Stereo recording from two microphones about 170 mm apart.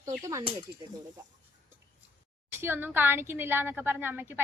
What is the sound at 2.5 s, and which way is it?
A woman's voice, 15° right (ahead or behind).